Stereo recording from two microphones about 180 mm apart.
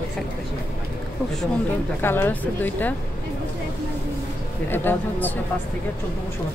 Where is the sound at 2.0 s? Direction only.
10° left (ahead or behind).